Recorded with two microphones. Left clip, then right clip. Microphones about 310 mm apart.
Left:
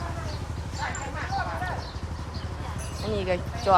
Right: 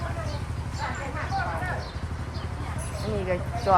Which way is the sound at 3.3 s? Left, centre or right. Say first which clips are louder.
Left 1 dB; centre.